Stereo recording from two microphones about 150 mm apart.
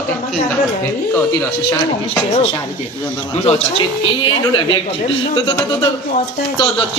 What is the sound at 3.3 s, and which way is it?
Speech, 45° left (ahead or behind).